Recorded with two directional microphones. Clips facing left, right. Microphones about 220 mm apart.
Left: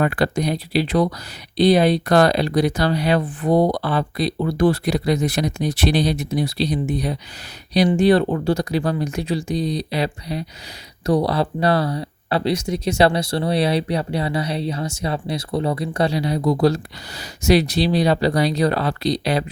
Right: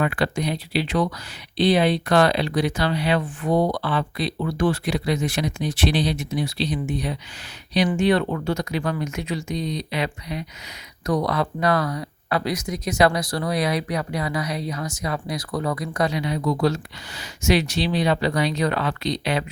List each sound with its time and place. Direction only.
0.0 s speech: 40° left (ahead or behind)